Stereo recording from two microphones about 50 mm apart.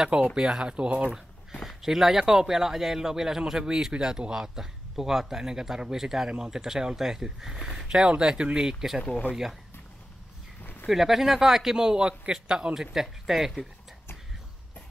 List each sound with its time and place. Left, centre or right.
0.0 s speech: centre
1.1 s speech: centre
10.6 s a sound: left
10.9 s speech: centre